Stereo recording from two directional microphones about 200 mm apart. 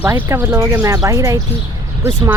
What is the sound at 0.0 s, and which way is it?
Speech, 10° right (ahead or behind).